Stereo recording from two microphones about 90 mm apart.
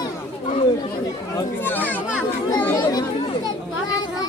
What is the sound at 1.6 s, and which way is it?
Speech, 20° left (ahead or behind).